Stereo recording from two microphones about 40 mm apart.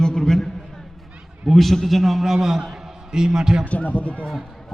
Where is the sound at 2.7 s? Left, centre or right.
Centre.